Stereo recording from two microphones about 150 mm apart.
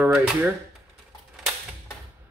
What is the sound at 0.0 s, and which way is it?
Speech, 10° right (ahead or behind).